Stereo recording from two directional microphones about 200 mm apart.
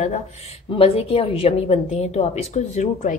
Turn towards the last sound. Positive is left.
turn(degrees=35)  # may be behind; listen again after turning